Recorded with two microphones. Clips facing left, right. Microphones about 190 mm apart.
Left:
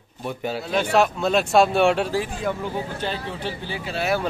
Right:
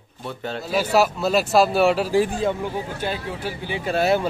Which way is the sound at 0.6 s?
5° right (ahead or behind).